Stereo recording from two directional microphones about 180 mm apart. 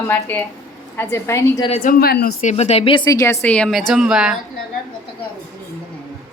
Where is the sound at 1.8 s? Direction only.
55° left (ahead or behind).